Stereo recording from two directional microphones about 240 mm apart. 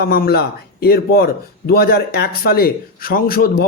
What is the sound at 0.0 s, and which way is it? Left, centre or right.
A man's voice, left.